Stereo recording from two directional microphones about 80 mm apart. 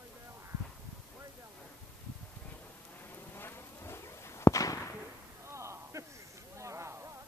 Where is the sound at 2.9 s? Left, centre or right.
Left.